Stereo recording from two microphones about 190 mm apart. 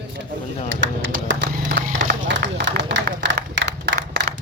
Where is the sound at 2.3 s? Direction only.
70° right (ahead or behind).